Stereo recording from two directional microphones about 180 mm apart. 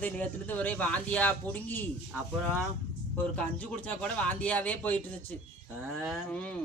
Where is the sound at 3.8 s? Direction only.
10° left (ahead or behind).